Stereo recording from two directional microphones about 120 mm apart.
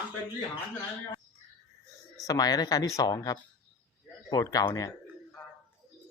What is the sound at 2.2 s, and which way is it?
Speech, 30° left (ahead or behind).